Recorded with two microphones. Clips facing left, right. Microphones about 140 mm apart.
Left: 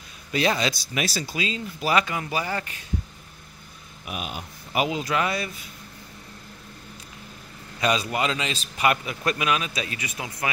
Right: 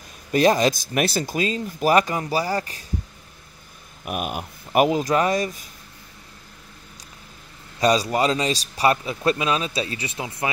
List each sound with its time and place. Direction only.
0.3 s speech: 45° right (ahead or behind)
4.0 s speech: 50° right (ahead or behind)
7.8 s a man's voice: 35° right (ahead or behind)